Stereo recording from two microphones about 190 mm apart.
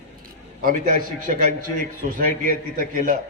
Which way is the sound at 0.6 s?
45° right (ahead or behind).